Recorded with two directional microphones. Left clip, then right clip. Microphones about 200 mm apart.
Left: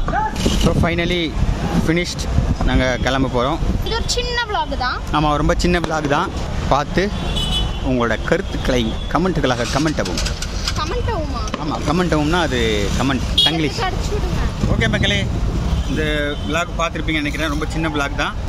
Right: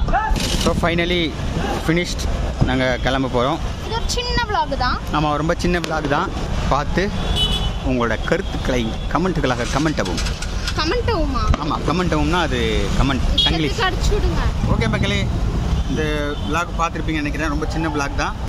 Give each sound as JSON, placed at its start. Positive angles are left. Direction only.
{"t": 0.7, "sound": "speech", "side_deg": -5}
{"t": 2.7, "sound": "speech", "side_deg": 0}
{"t": 5.1, "sound": "speech", "side_deg": 5}
{"t": 10.8, "sound": "vehicle", "side_deg": -45}
{"t": 11.9, "sound": "speech", "side_deg": 10}
{"t": 14.9, "sound": "speech", "side_deg": 5}